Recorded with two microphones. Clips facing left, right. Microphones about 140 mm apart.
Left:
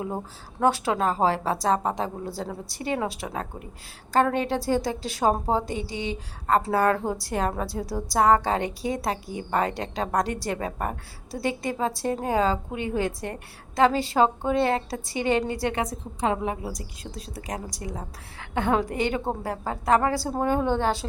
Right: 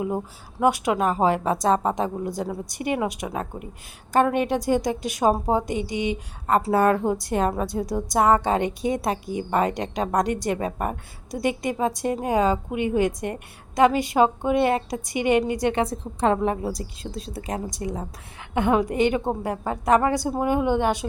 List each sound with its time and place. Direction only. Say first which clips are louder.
0.6 s a woman's voice: right 2 dB; 15° right (ahead or behind)
16.3 s a woman's voice: right 5 dB; 40° right (ahead or behind)
17.0 s a woman's voice: right 5 dB; 25° right (ahead or behind)